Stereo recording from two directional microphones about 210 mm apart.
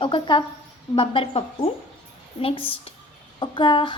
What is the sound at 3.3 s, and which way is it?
Speech, 25° left (ahead or behind).